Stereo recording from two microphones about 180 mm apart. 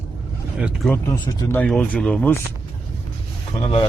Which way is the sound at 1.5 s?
5° left (ahead or behind).